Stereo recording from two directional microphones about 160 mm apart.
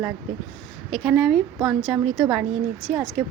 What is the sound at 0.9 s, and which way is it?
A woman's voice, 5° right (ahead or behind).